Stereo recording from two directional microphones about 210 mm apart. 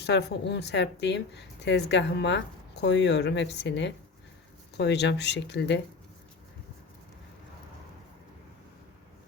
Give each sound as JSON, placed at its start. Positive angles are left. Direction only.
{"t": 0.0, "sound": "a woman's voice", "side_deg": 55}